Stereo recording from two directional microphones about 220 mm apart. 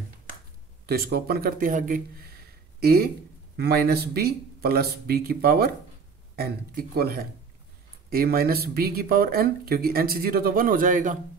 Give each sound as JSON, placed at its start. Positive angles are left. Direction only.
{"t": 0.8, "sound": "a man's voice", "side_deg": -45}